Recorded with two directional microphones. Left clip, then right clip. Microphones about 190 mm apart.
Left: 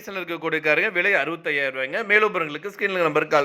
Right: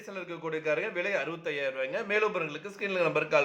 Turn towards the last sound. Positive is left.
turn(degrees=35)  # may be behind; listen again after turning